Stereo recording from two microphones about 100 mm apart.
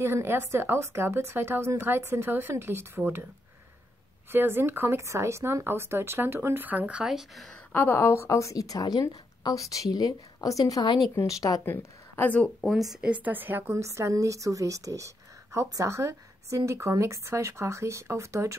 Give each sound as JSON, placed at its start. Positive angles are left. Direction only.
{"t": 0.0, "sound": "a woman's voice", "side_deg": -25}
{"t": 4.3, "sound": "a woman's voice", "side_deg": -20}
{"t": 7.7, "sound": "a woman's voice", "side_deg": 20}
{"t": 11.1, "sound": "a woman's voice", "side_deg": 35}
{"t": 11.6, "sound": "a woman's voice", "side_deg": 20}
{"t": 12.6, "sound": "a woman's voice", "side_deg": 0}